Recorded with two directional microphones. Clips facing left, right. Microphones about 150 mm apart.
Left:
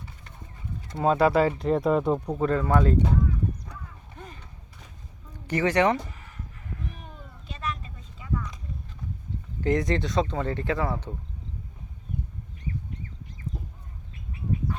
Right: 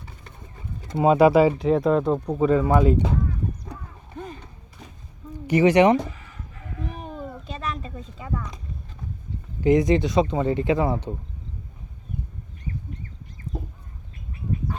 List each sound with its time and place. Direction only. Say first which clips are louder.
0.9 s speech: right 5 dB; 10° right (ahead or behind); by 2.3 s 5° left (ahead or behind)
2.3 s speech: right 6 dB; 5° right (ahead or behind)
4.2 s skateboard: right 8 dB; 30° right (ahead or behind)
5.5 s speech: right 6 dB; 15° right (ahead or behind)
6.9 s a sound: right 11 dB; 90° right
7.5 s a sound: right 1 dB; 30° right (ahead or behind)
9.6 s speech: right 6 dB; 10° right (ahead or behind)